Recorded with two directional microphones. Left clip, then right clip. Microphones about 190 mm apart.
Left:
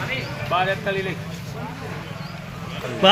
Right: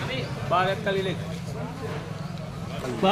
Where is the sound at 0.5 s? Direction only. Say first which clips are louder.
Left 2 dB; 30° right (ahead or behind).